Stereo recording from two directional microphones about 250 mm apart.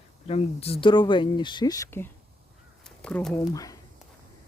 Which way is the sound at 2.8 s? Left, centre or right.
Centre.